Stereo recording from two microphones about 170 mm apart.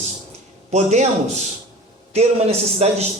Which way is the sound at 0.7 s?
40° right (ahead or behind).